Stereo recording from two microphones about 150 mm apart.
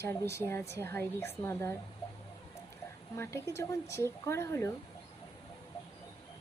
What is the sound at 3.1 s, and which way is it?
A woman's voice, 20° left (ahead or behind).